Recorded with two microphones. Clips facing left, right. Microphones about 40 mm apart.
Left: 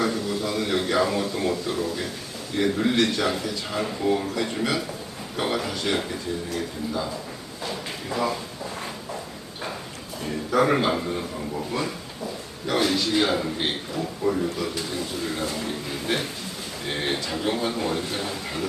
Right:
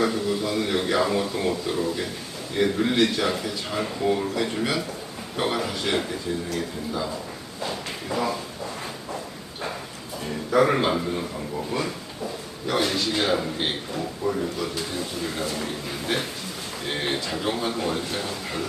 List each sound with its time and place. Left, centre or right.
0.3 s speech: centre
2.6 s a man's voice: centre
10.5 s a man's voice: centre